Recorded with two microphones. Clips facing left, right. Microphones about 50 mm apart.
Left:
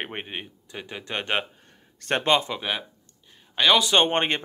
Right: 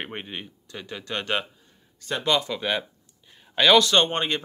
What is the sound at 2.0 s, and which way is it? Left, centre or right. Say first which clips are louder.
Speech: left 4 dB; left.